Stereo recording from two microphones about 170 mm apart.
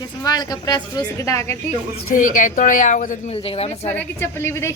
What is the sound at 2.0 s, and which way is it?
A woman's voice, 50° left (ahead or behind).